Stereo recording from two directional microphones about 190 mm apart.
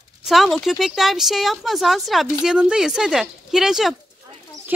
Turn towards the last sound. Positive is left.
turn(degrees=0)  # may be behind; listen again after turning